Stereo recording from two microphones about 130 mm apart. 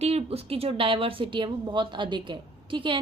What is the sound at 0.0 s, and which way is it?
A woman's voice, 50° right (ahead or behind).